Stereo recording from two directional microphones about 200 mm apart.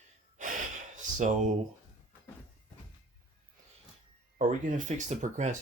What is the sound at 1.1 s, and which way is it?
Speech, 35° right (ahead or behind).